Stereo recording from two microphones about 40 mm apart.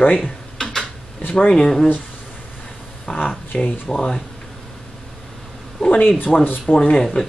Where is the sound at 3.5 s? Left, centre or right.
Left.